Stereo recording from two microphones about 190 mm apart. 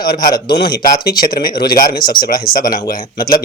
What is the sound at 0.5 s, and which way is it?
Speech, 55° left (ahead or behind).